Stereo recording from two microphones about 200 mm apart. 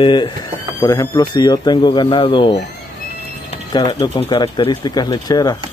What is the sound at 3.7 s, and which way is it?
Speech, 20° left (ahead or behind).